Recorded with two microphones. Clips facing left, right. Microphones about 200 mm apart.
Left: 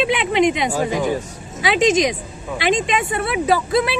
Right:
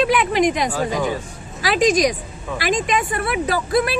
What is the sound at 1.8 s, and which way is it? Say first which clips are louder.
Speech: even; 25° left (ahead or behind).